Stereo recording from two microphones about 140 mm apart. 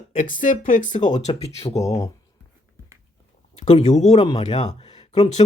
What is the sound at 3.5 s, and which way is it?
Speech, 55° left (ahead or behind).